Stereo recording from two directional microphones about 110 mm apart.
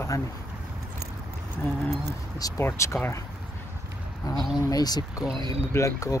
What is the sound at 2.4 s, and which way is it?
Speech, 25° left (ahead or behind).